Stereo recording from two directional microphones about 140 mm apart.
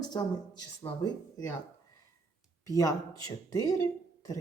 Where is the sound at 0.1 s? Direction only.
30° left (ahead or behind).